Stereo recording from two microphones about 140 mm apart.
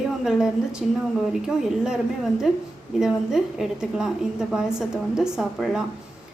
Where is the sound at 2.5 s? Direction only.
5° right (ahead or behind).